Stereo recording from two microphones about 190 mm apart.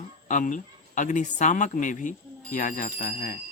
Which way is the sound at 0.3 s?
40° left (ahead or behind).